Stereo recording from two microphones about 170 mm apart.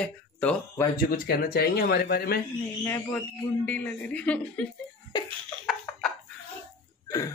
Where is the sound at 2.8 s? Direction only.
10° left (ahead or behind).